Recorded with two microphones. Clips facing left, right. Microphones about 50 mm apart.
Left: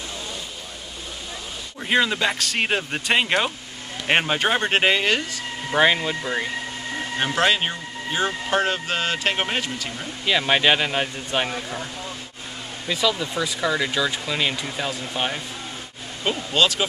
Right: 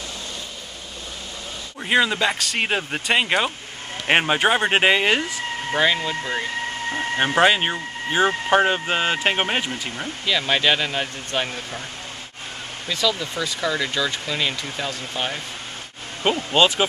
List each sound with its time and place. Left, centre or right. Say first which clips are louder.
1.8 s speech: right 1 dB; centre
5.8 s speech: left 2 dB; centre
7.2 s speech: right 3 dB; centre
10.2 s speech: left 1 dB; centre
12.8 s speech: left 1 dB; centre
16.3 s speech: right 3 dB; right